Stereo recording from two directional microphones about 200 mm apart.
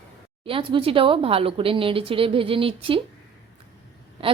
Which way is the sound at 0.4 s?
25° right (ahead or behind).